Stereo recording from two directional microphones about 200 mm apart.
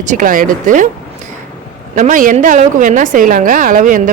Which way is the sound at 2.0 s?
40° right (ahead or behind).